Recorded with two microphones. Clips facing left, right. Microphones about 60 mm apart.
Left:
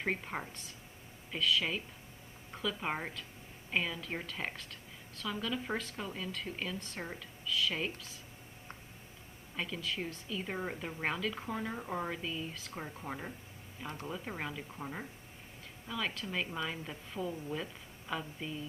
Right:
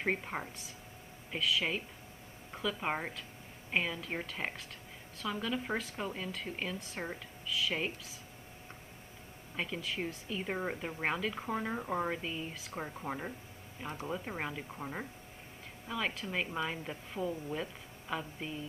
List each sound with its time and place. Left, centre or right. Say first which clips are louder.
0.0 s a woman's voice: right 2 dB; centre
2.8 s a woman's voice: right 1 dB; centre
6.0 s speech: right 2 dB; right
6.6 s a woman's voice: right 1 dB; centre
9.6 s a woman's voice: right 1 dB; centre